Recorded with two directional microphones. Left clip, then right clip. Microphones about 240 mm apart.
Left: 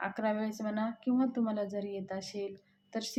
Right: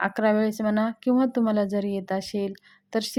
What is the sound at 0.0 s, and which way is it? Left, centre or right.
A woman's voice, right.